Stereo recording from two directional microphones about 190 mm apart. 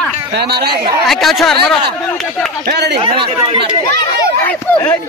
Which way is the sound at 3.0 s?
30° right (ahead or behind).